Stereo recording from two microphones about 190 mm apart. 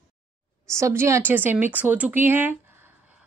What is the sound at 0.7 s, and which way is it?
A woman's voice, 15° right (ahead or behind).